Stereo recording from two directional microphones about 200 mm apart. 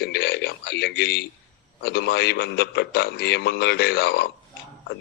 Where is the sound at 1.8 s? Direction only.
55° left (ahead or behind).